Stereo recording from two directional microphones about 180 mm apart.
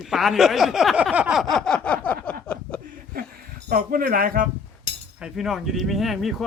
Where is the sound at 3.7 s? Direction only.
50° right (ahead or behind).